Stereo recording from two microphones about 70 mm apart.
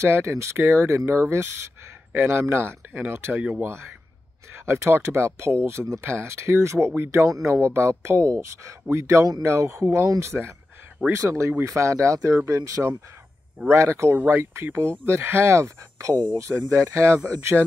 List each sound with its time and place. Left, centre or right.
0.0 s speech: right
14.1 s speech: right